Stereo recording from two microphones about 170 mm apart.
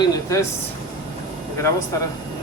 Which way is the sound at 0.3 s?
20° left (ahead or behind).